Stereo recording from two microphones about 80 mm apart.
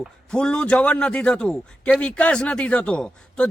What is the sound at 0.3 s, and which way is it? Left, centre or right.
A man's voice, centre.